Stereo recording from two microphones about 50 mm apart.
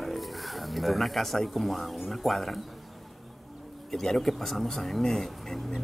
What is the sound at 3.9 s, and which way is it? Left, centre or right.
Speech, centre.